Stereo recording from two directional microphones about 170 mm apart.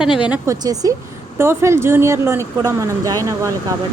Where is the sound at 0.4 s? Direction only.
20° right (ahead or behind).